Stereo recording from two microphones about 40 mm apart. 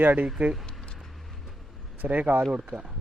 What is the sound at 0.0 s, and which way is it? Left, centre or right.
Speech, right.